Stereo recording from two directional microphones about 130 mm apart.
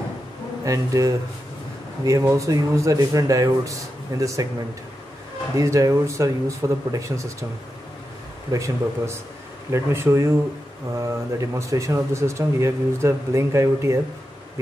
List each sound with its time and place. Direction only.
0.7 s speech: 25° right (ahead or behind)
5.6 s speech: 25° right (ahead or behind)
8.5 s speech: 25° right (ahead or behind)